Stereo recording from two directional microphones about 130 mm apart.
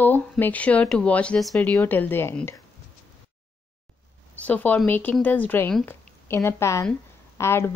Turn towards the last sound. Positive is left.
turn(degrees=20)  # may be behind; listen again after turning